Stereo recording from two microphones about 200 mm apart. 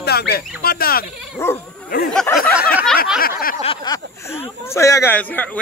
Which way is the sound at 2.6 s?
50° left (ahead or behind).